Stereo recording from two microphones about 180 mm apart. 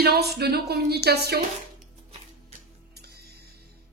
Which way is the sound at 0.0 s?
60° right (ahead or behind).